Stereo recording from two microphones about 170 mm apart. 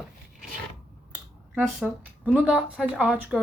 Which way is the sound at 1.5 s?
5° right (ahead or behind).